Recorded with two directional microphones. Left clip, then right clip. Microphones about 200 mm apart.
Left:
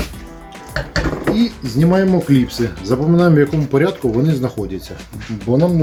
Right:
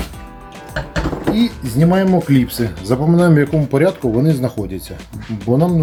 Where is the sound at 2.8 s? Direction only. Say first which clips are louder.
Even; 45° right (ahead or behind).